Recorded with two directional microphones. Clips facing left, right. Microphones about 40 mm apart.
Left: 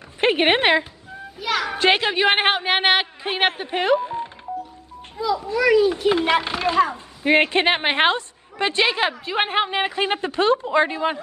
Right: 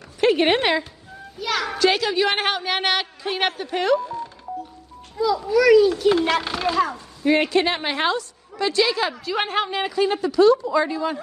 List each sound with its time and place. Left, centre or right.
0.2 s a woman's voice: left
1.4 s a child's voice: centre
1.8 s a woman's voice: left
5.1 s a child's voice: centre
7.2 s a woman's voice: left